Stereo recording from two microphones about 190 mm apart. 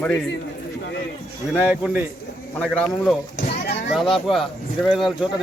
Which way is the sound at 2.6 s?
5° left (ahead or behind).